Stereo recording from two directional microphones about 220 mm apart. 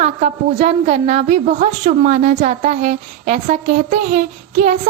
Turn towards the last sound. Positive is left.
turn(degrees=-30)  # may be behind; listen again after turning